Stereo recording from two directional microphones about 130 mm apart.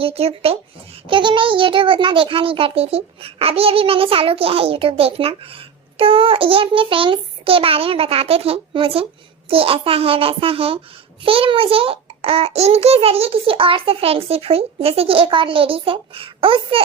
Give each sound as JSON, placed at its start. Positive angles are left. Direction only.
{"t": 0.0, "sound": "a child's voice", "side_deg": -50}
{"t": 1.0, "sound": "a child's voice", "side_deg": -40}